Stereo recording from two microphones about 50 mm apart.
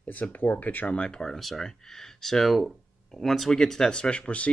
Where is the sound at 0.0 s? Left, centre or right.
Left.